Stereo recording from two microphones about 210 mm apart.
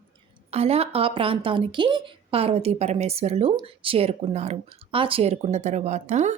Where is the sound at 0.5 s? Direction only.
30° right (ahead or behind).